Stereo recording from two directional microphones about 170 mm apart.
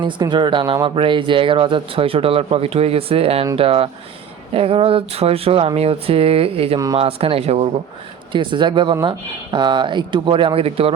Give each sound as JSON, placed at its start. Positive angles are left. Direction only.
{"t": 0.0, "sound": "speech", "side_deg": -25}
{"t": 6.7, "sound": "speech", "side_deg": -20}
{"t": 7.0, "sound": "speech", "side_deg": -35}